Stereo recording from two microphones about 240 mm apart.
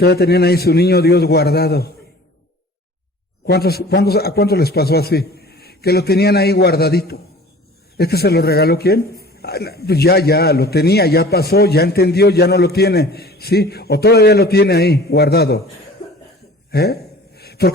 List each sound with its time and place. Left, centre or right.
0.0 s speech: left
3.4 s speech: left
16.7 s gasp: left